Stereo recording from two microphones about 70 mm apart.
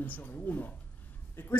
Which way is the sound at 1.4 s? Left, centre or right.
Left.